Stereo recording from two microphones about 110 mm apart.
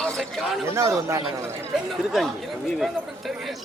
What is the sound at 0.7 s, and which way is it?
Speech, 25° right (ahead or behind).